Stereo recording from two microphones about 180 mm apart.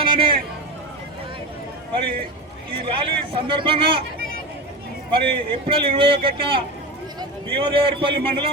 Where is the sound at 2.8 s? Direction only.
30° right (ahead or behind).